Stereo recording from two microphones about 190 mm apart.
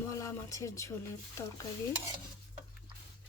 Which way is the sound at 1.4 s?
15° left (ahead or behind).